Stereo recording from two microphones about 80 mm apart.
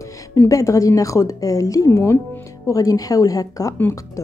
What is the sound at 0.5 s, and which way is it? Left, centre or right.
Speech, left.